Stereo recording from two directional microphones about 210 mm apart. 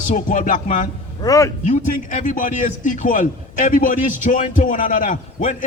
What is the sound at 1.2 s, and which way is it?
Speech, 15° left (ahead or behind).